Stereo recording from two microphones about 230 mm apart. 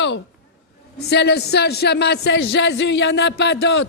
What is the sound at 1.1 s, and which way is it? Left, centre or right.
A man's voice, left.